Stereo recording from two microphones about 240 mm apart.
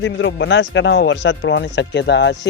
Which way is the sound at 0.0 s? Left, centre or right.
Left.